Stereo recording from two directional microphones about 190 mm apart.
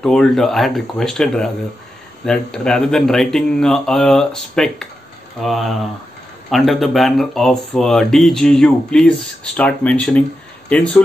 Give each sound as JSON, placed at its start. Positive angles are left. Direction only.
{"t": 0.0, "sound": "speech", "side_deg": 5}